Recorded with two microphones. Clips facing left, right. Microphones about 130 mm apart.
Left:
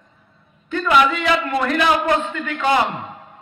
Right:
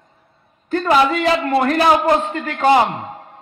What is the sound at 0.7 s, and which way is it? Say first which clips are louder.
A man's voice: right 2 dB; 35° right (ahead or behind).